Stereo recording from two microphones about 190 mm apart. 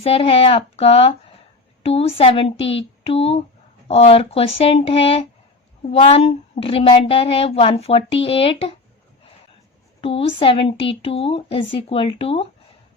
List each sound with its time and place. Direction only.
0.0 s speech: 30° left (ahead or behind)
10.0 s speech: 30° left (ahead or behind)